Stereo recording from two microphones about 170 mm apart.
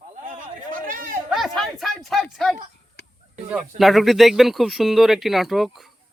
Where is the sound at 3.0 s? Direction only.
80° left.